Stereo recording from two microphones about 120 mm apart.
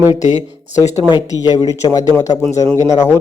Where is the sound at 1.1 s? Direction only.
35° left (ahead or behind).